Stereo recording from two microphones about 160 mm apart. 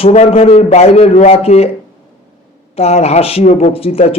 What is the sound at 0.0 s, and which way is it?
Speech, 40° left (ahead or behind).